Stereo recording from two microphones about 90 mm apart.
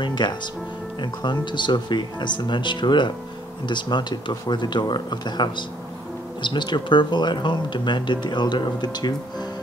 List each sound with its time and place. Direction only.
0.0 s speech: 60° left (ahead or behind)